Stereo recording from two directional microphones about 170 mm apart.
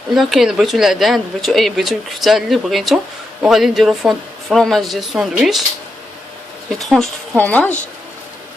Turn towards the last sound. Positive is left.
turn(degrees=10)  # may be behind; listen again after turning